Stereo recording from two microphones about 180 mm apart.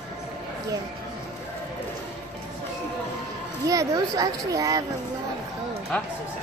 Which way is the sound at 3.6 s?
20° right (ahead or behind).